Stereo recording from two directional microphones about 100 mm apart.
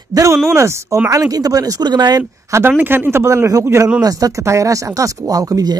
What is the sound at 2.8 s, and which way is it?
Speech, 20° right (ahead or behind).